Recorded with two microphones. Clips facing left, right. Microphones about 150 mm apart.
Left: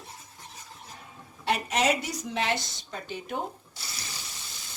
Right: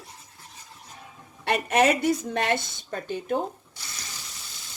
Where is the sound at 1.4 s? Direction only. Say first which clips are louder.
Right 5 dB; 55° right (ahead or behind).